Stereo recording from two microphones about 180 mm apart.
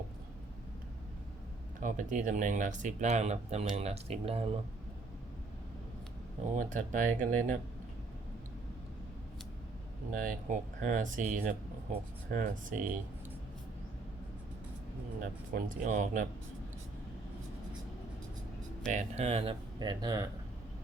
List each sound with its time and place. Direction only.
1.8 s speech: 45° right (ahead or behind)
6.6 s speech: 45° right (ahead or behind)
10.1 s speech: 50° right (ahead or behind)
15.5 s speech: 50° right (ahead or behind)
18.9 s speech: 40° right (ahead or behind); by 20.2 s 20° right (ahead or behind)